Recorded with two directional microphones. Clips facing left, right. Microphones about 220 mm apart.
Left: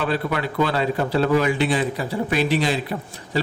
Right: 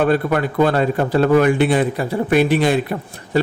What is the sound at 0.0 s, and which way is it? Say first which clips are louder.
A man's voice: right 7 dB; 50° right (ahead or behind).